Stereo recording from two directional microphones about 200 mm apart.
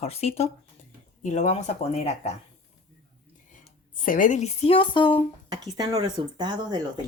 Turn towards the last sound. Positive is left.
turn(degrees=-20)  # may be behind; listen again after turning